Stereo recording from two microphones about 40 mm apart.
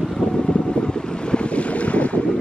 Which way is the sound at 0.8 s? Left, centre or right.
Left.